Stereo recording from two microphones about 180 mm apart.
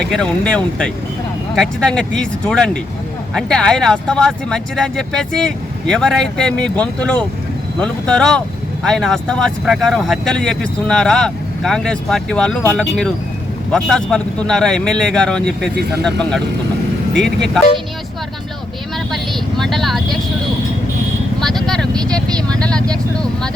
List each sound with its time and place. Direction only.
0.1 s speech: 5° left (ahead or behind)
19.1 s vehicle: centre (ahead or behind)
21.4 s vehicle: centre (ahead or behind)
22.6 s speech: 5° left (ahead or behind)